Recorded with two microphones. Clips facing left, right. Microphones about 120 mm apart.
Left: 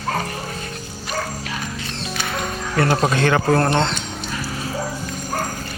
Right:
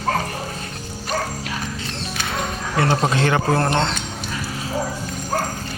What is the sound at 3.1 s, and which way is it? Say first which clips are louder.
Speech: left 2 dB; 25° right (ahead or behind).